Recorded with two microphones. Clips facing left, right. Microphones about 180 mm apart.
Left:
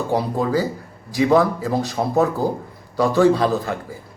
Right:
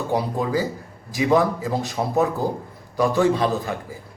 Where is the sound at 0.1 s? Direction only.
15° right (ahead or behind).